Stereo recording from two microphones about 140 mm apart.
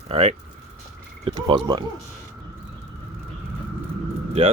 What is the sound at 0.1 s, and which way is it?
Speech, 50° right (ahead or behind).